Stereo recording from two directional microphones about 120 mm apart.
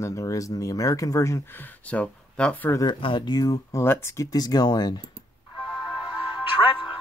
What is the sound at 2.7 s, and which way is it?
Speech, 35° left (ahead or behind).